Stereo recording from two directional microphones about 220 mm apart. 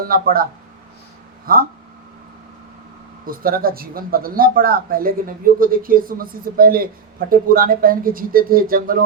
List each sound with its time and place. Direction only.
0.0 s speech: 40° right (ahead or behind)
1.5 s speech: 40° right (ahead or behind)
3.2 s speech: 40° right (ahead or behind)